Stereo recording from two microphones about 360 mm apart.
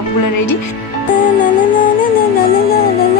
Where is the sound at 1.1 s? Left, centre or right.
Left.